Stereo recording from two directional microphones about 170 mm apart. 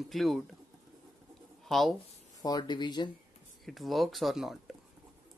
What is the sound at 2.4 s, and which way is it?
Speech, 25° left (ahead or behind).